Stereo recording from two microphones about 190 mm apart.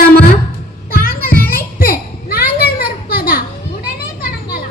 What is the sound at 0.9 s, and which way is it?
Music, 50° left (ahead or behind).